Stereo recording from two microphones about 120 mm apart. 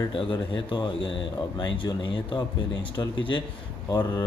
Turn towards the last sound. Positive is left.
turn(degrees=35)  # may be behind; listen again after turning